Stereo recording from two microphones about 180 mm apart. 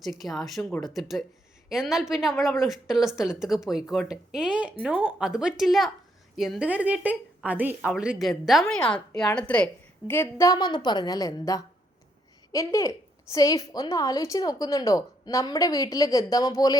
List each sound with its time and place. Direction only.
0.0 s a woman's voice: centre (ahead or behind); by 16.7 s 20° left (ahead or behind)